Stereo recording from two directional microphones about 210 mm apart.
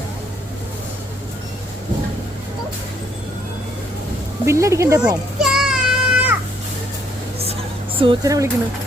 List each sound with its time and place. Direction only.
4.4 s speech: 15° right (ahead or behind)
5.4 s child singing: centre (ahead or behind)
7.9 s speech: 20° right (ahead or behind)